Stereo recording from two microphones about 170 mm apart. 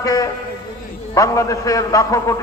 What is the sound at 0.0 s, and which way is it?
A man's voice, 20° left (ahead or behind).